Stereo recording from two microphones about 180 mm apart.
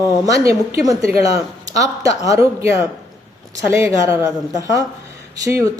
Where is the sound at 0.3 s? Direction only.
15° right (ahead or behind).